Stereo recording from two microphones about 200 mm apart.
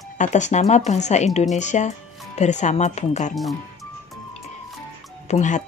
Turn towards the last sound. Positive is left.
turn(degrees=35)  # may be behind; listen again after turning